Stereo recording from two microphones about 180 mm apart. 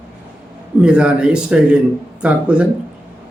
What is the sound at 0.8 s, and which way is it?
A man's voice, 5° right (ahead or behind).